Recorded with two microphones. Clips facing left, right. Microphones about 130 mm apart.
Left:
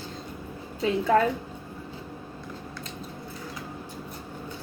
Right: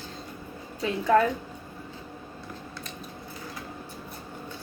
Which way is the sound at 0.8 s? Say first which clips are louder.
Even; 30° left (ahead or behind).